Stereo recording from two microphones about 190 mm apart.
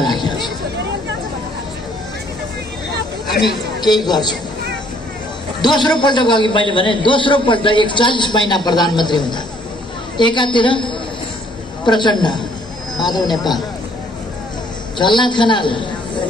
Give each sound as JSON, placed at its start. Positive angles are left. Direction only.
{"t": 0.0, "sound": "hubbub", "side_deg": 20}
{"t": 3.8, "sound": "a man's voice", "side_deg": 20}
{"t": 5.6, "sound": "a man's voice", "side_deg": 20}
{"t": 15.0, "sound": "a man's voice", "side_deg": 25}